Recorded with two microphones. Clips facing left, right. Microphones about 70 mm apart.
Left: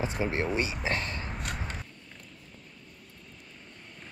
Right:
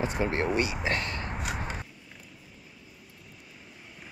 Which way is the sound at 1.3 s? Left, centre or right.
Centre.